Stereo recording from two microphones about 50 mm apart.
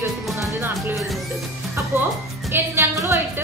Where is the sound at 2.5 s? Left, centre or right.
Right.